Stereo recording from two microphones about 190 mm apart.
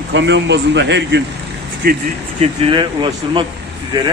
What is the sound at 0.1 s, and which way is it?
A man's voice, 70° right (ahead or behind).